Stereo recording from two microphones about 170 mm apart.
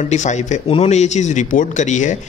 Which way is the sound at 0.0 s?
45° left (ahead or behind).